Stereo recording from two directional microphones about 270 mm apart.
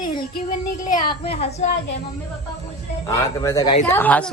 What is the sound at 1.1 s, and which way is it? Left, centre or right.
Speech, left.